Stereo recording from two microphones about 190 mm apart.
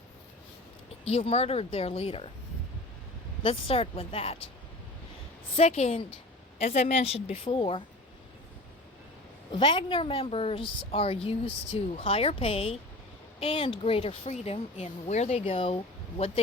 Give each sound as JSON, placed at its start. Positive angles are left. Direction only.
{"t": 1.0, "sound": "speech", "side_deg": 30}
{"t": 3.4, "sound": "a woman's voice", "side_deg": 30}
{"t": 5.5, "sound": "speech", "side_deg": 35}
{"t": 9.5, "sound": "a woman's voice", "side_deg": 25}